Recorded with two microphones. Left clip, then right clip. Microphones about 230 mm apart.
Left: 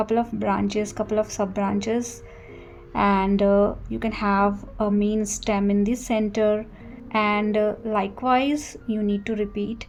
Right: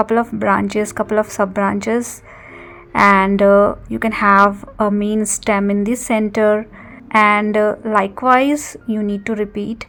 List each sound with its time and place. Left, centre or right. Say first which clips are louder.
0.0 s a woman's voice: right 7 dB; right